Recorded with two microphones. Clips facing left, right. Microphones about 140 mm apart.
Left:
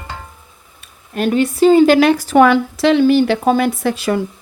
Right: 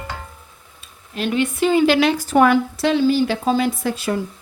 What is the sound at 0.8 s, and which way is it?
Speech, 45° left (ahead or behind).